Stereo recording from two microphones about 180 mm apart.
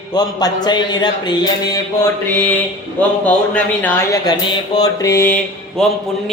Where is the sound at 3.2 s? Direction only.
10° left (ahead or behind).